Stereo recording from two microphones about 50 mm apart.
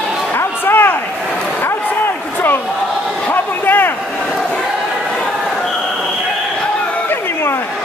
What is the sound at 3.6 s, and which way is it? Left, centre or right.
Vehicle, left.